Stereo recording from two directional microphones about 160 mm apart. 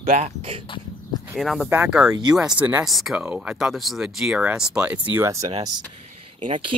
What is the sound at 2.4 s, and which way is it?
Speech, 5° right (ahead or behind).